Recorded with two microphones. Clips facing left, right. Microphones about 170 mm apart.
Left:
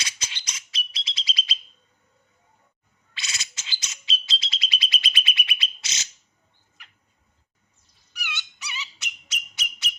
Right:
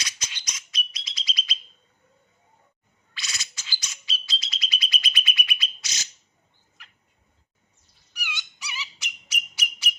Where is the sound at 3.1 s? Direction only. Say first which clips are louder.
Left 1 dB; 25° left (ahead or behind).